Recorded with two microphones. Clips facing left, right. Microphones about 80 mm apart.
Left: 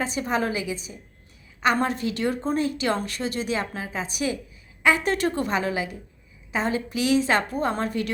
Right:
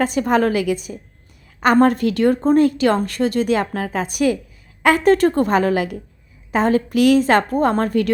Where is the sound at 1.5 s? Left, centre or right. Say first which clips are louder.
Right 9 dB; right.